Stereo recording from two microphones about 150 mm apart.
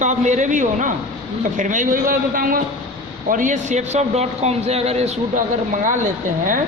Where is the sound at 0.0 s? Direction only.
55° right (ahead or behind); by 2.6 s 70° right (ahead or behind).